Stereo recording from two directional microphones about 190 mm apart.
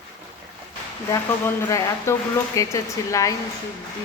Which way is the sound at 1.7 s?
15° left (ahead or behind).